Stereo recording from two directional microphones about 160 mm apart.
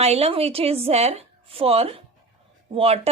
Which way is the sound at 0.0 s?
40° right (ahead or behind).